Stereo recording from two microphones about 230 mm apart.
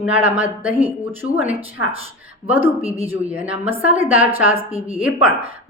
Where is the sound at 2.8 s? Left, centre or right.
Right.